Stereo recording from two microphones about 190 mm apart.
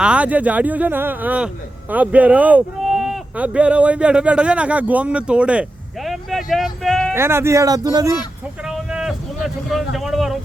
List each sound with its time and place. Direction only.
0.0 s speech: 5° right (ahead or behind)
7.1 s speech: 15° right (ahead or behind)
8.6 s speech: 5° right (ahead or behind)